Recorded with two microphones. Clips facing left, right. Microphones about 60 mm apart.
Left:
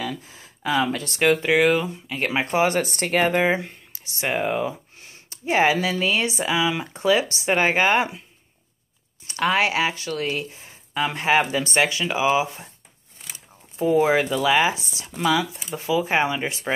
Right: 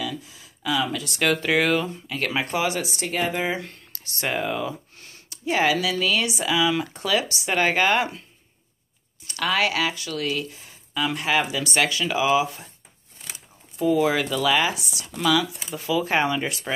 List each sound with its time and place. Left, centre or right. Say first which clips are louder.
0.0 s a sound: left 1 dB; left
1.2 s speech: left 3 dB; centre
2.5 s speech: left 4 dB; left
3.9 s speech: left 2 dB; centre
9.2 s speech: left 2 dB; left
13.7 s speech: left 2 dB; left
16.0 s speech: even; centre